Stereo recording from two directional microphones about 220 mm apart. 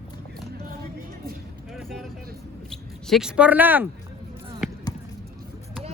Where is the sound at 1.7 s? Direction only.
Centre (ahead or behind).